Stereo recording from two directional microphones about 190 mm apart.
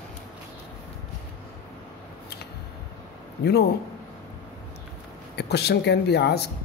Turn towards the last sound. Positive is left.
turn(degrees=60)  # may be behind; listen again after turning